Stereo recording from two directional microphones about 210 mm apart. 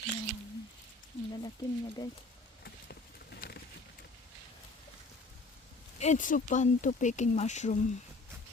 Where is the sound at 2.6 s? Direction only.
50° left (ahead or behind).